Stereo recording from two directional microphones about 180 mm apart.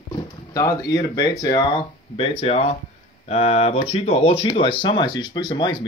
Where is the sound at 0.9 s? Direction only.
20° left (ahead or behind).